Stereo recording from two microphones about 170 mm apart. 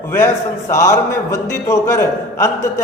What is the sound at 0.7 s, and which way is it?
A man's voice, 15° left (ahead or behind).